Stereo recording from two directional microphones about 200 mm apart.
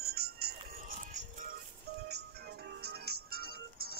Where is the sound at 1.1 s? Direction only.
40° right (ahead or behind).